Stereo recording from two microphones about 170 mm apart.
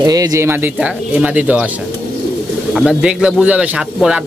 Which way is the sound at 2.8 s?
5° right (ahead or behind).